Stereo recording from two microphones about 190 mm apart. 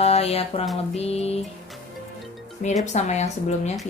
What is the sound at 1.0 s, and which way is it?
Speech, 35° left (ahead or behind).